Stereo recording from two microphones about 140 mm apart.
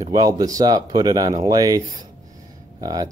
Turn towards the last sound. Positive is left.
turn(degrees=-30)  # may be behind; listen again after turning